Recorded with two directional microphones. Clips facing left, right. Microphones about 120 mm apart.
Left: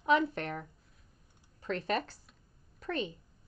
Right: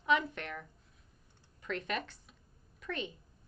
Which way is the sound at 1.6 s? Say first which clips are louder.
Left 4 dB; 35° left (ahead or behind).